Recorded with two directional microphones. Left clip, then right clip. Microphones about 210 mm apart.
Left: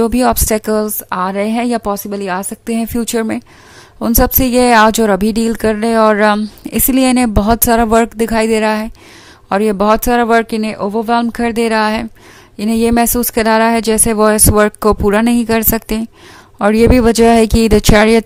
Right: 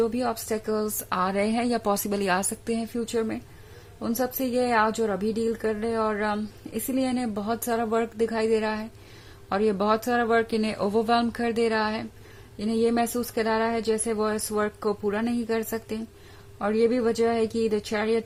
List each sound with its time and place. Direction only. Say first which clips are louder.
0.0 s a woman's voice: left 13 dB; 45° left (ahead or behind)